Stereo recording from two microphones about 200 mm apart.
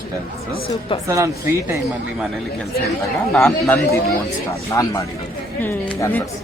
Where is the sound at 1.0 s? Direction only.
15° right (ahead or behind).